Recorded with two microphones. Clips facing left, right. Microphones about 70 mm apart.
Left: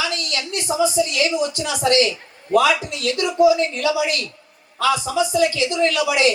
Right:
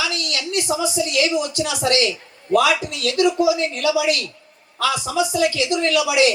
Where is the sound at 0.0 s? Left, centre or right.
Left.